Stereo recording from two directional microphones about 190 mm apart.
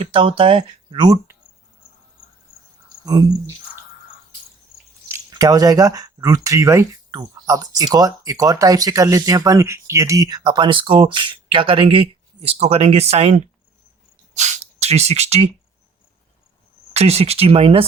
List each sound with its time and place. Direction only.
0.0 s speech: 25° right (ahead or behind)
3.1 s speech: 20° right (ahead or behind)
5.0 s speech: 15° right (ahead or behind); by 15.5 s 35° right (ahead or behind)
16.9 s speech: 35° right (ahead or behind)